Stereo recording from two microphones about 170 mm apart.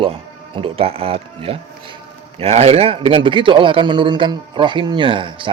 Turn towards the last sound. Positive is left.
turn(degrees=-30)  # may be behind; listen again after turning